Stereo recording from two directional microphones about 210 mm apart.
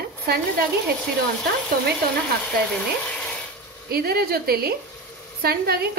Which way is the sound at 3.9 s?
45° right (ahead or behind).